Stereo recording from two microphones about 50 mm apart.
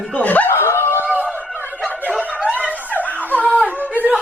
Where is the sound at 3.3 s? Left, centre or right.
Left.